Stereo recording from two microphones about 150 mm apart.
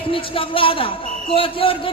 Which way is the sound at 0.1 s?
35° left (ahead or behind).